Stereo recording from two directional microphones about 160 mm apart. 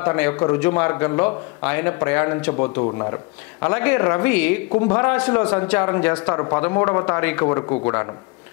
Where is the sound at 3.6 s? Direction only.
10° left (ahead or behind).